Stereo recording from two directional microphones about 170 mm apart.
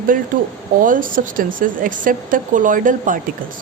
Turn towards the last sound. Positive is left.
turn(degrees=-50)  # may be behind; listen again after turning